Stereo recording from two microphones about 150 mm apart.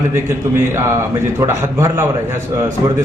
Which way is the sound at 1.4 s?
20° right (ahead or behind).